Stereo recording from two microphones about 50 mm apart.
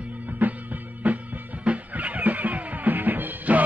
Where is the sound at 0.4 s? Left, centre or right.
Right.